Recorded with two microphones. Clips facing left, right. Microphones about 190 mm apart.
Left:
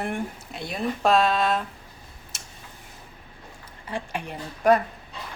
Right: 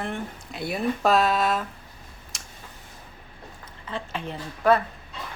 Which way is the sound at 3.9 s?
15° left (ahead or behind).